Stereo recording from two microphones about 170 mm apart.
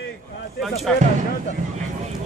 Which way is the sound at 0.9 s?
5° left (ahead or behind).